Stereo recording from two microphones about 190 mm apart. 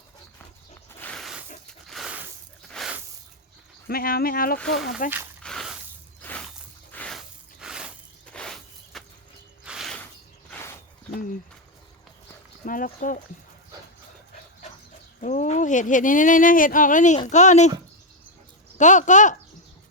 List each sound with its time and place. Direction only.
0.9 s a sound: 5° left (ahead or behind)
3.8 s speech: 50° left (ahead or behind)
5.4 s squish: centre (ahead or behind)
6.2 s a sound: 10° left (ahead or behind)
10.5 s snake: 15° left (ahead or behind)
12.6 s speech: 45° left (ahead or behind)
15.2 s speech: 40° left (ahead or behind)
18.8 s speech: 40° left (ahead or behind)